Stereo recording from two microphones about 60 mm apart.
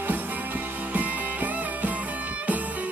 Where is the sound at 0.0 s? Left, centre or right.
Right.